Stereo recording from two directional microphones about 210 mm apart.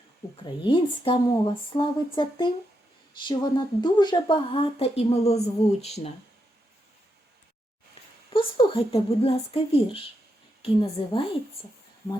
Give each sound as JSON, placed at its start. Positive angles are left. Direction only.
{"t": 0.4, "sound": "speech", "side_deg": 20}
{"t": 8.3, "sound": "speech", "side_deg": 25}